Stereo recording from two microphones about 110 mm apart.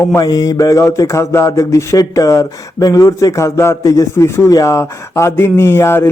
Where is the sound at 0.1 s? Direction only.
30° left (ahead or behind).